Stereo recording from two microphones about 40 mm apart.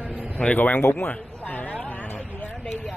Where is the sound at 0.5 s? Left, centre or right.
Left.